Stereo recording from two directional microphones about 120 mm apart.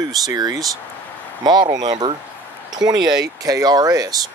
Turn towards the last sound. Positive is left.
turn(degrees=-30)  # may be behind; listen again after turning